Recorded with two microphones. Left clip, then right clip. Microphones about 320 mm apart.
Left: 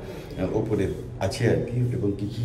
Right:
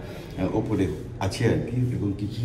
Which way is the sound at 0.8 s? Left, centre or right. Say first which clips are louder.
Even; centre.